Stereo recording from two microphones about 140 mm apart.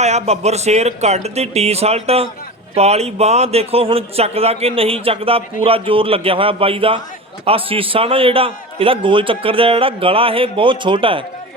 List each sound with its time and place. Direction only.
0.0 s a man's voice: 50° right (ahead or behind)